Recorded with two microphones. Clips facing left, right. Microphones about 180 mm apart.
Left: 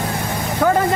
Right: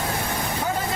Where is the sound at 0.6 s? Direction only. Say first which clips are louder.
Left 13 dB; 65° left (ahead or behind).